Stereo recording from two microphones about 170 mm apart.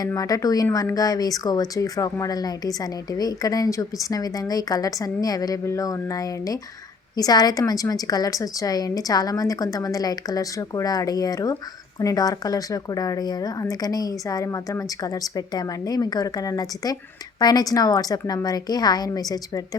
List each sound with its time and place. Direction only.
0.0 s speech: 20° left (ahead or behind)